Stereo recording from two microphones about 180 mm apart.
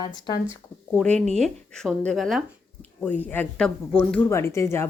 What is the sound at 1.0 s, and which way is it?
Speech, 5° left (ahead or behind).